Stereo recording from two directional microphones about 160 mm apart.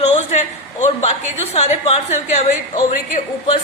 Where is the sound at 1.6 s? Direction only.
45° left (ahead or behind).